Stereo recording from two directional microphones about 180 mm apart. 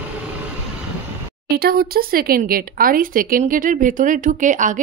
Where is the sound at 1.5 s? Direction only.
60° right (ahead or behind).